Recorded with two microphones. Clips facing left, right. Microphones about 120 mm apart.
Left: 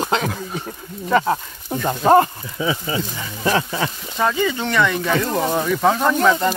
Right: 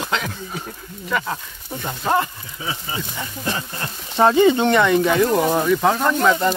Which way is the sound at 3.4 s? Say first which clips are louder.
Left 9 dB; 90° left.